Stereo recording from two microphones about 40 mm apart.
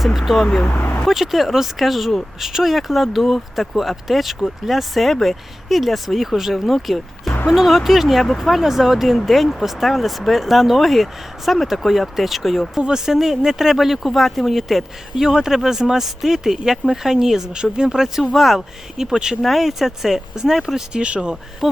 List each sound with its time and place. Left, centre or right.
0.0 s speech: centre
18.9 s speech: centre
19.4 s speech: centre
20.9 s speech: right
21.6 s speech: centre